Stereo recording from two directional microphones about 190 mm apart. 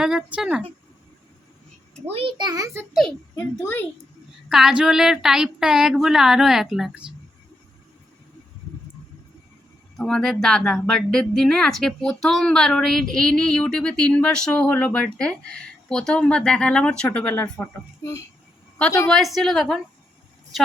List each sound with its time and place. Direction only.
0.0 s speech: 5° right (ahead or behind)
2.0 s a child's voice: 30° right (ahead or behind)
2.9 s a child's voice: centre (ahead or behind)
4.4 s speech: 5° right (ahead or behind)
10.0 s speech: centre (ahead or behind)
19.0 s speech: centre (ahead or behind)